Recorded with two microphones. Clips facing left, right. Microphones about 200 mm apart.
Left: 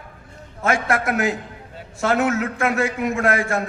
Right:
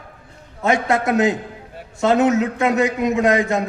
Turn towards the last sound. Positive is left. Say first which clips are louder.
# right 4 dB
turn(degrees=-20)  # may be behind; listen again after turning